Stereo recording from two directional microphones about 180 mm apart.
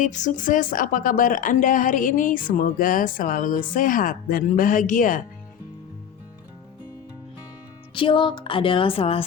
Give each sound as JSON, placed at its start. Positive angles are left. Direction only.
{"t": 0.0, "sound": "a woman's voice", "side_deg": 45}
{"t": 7.9, "sound": "music", "side_deg": 30}